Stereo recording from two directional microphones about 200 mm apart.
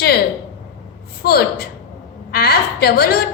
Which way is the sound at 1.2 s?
50° left (ahead or behind).